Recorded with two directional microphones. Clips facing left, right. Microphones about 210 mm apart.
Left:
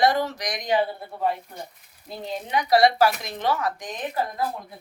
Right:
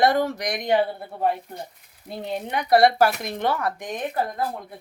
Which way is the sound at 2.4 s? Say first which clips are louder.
Right 1 dB; 55° right (ahead or behind).